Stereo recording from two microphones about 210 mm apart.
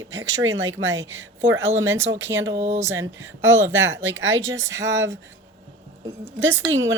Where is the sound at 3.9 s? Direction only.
65° right (ahead or behind).